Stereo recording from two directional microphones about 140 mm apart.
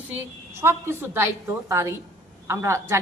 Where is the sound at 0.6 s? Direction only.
15° right (ahead or behind).